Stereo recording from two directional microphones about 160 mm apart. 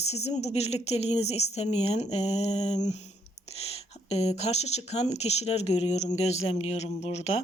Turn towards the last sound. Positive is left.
turn(degrees=40)  # may be behind; listen again after turning